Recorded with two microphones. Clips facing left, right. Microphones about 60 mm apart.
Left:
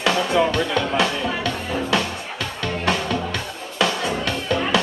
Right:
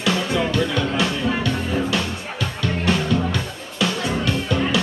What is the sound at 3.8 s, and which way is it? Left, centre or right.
Music, left.